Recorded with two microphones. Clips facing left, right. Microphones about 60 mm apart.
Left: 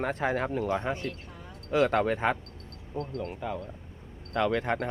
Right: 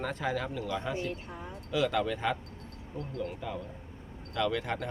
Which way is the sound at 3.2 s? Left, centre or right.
Centre.